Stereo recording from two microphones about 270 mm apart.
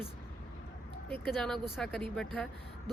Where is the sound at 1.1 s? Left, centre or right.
Centre.